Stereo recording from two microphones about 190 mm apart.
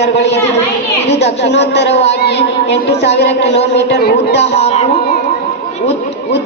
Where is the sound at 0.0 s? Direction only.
65° left (ahead or behind).